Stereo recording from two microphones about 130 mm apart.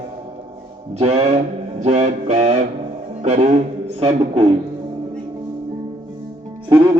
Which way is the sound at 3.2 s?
60° right (ahead or behind).